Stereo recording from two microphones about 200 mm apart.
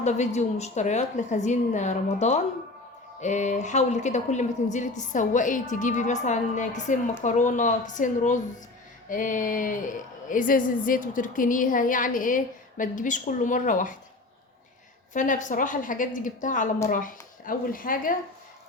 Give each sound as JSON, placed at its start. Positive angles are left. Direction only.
{"t": 0.0, "sound": "speech", "side_deg": 35}
{"t": 15.1, "sound": "speech", "side_deg": 40}